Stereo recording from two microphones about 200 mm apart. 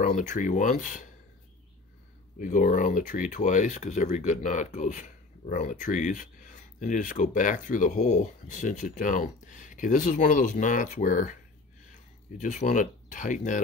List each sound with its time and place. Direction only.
0.0 s speech: 40° left (ahead or behind)
2.3 s speech: 40° left (ahead or behind)